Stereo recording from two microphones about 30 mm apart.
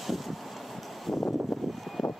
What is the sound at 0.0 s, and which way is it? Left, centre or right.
Wind, centre.